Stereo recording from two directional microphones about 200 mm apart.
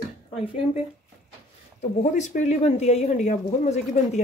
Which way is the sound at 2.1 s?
35° left (ahead or behind).